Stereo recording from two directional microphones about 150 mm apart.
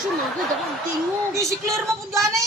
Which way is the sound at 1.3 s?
20° right (ahead or behind).